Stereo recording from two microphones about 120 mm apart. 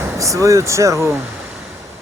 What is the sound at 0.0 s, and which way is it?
Speech, 25° right (ahead or behind).